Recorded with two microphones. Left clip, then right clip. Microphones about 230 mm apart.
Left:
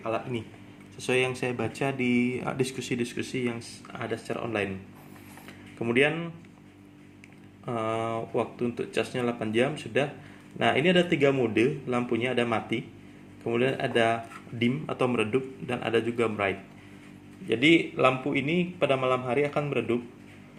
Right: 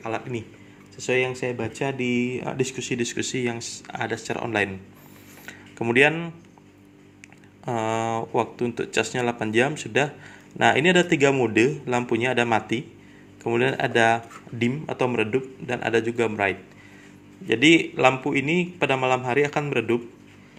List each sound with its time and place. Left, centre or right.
0.0 s speech: right
0.9 s speech: centre
7.6 s a man's voice: right